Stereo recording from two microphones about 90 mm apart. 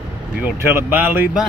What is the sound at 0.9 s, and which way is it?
Speech, 20° right (ahead or behind).